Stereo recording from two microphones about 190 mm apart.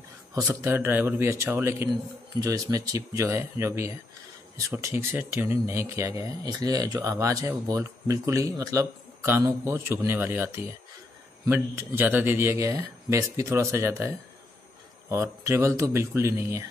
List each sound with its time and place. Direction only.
0.3 s speech: 15° right (ahead or behind)
15.4 s speech: 15° right (ahead or behind)